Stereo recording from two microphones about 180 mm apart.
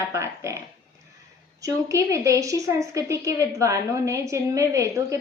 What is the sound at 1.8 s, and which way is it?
Speech, 15° right (ahead or behind).